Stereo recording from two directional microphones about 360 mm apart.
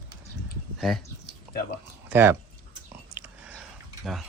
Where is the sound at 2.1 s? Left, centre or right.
Centre.